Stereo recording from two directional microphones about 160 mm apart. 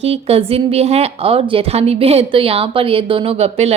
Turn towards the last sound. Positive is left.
turn(degrees=-40)  # may be behind; listen again after turning